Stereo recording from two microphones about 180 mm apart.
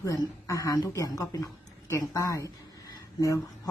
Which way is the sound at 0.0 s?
20° left (ahead or behind).